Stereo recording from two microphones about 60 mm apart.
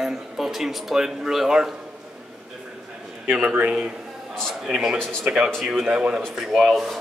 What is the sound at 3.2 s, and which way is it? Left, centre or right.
Speech, centre.